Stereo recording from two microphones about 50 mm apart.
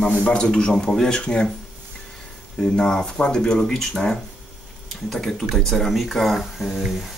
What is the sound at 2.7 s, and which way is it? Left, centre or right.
Speech, centre.